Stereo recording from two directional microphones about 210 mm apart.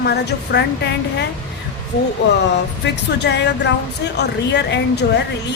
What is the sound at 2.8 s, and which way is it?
A woman's voice, 55° left (ahead or behind).